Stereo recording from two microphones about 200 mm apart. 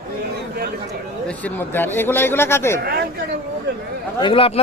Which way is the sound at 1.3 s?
10° left (ahead or behind).